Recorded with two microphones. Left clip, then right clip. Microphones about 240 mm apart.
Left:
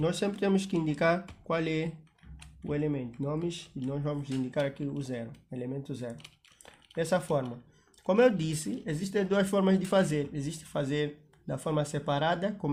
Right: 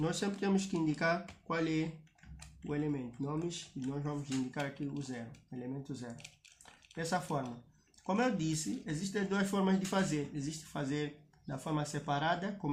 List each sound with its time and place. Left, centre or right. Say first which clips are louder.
0.0 s speech: left 6 dB; left